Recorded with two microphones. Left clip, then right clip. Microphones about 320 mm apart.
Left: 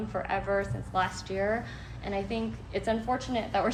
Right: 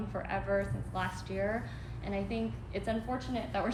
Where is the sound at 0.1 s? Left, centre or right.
Left.